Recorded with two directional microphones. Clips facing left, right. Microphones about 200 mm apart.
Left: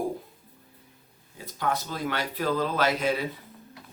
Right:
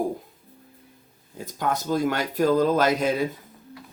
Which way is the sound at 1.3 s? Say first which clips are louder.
Right 2 dB; 45° right (ahead or behind).